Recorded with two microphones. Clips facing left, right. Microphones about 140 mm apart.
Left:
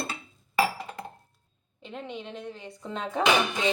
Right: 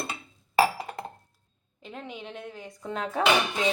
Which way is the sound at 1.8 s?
Centre (ahead or behind).